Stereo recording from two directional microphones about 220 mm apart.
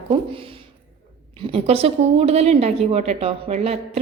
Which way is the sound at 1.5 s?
25° right (ahead or behind).